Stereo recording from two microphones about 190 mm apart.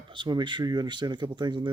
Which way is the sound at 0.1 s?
25° right (ahead or behind).